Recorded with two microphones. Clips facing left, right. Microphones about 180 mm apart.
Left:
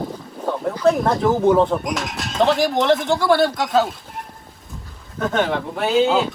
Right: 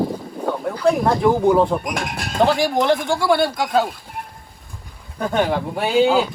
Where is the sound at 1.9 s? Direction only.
55° right (ahead or behind).